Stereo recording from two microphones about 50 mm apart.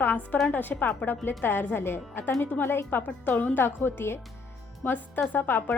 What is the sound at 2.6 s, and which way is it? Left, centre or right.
Speech, left.